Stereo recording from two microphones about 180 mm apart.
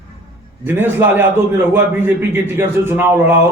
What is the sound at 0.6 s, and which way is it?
A man's voice, 10° right (ahead or behind).